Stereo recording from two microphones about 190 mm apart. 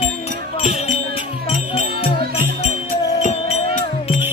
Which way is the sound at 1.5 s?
35° left (ahead or behind).